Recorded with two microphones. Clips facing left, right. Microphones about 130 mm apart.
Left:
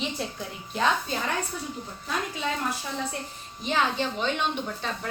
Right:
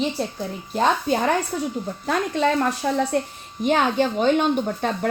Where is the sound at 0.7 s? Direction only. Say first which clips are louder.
Right 6 dB; 45° right (ahead or behind); by 3.0 s 65° right (ahead or behind).